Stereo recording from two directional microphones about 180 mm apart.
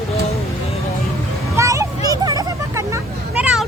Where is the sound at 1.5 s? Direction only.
15° right (ahead or behind).